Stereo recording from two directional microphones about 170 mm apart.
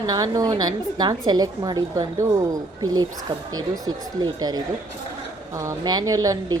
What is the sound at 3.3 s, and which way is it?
A woman's voice, 35° right (ahead or behind).